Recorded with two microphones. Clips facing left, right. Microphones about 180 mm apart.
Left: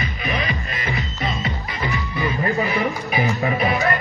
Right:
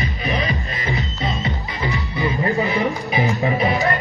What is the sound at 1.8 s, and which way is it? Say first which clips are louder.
Music: right 1 dB; 20° right (ahead or behind).